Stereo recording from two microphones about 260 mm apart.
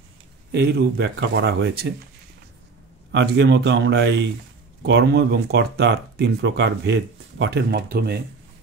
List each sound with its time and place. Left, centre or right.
0.5 s speech: right
3.1 s a man's voice: right